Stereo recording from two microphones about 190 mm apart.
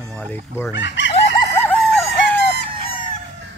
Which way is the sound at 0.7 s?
70° left (ahead or behind).